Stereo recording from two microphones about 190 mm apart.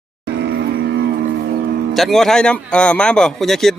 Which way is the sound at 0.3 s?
65° right (ahead or behind).